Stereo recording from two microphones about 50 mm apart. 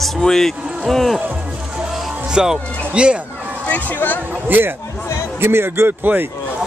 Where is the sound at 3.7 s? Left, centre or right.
Left.